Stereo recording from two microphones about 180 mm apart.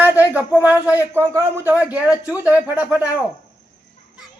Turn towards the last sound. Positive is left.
turn(degrees=-10)  # may be behind; listen again after turning